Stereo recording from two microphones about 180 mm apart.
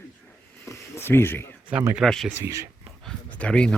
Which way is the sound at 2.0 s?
5° left (ahead or behind).